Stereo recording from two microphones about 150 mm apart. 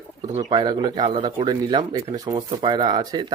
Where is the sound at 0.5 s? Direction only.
30° right (ahead or behind).